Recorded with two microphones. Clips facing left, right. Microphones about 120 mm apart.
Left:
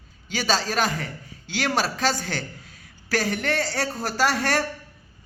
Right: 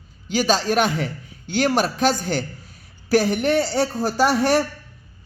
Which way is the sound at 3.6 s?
20° right (ahead or behind).